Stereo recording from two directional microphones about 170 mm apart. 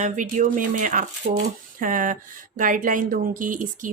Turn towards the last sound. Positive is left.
turn(degrees=-50)  # may be behind; listen again after turning